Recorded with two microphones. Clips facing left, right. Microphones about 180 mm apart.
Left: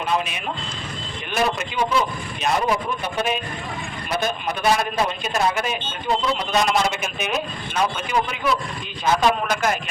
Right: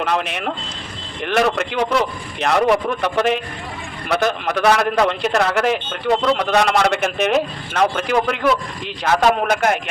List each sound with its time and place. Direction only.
0.0 s a man's voice: 75° right (ahead or behind)
9.0 s a man's voice: 65° right (ahead or behind)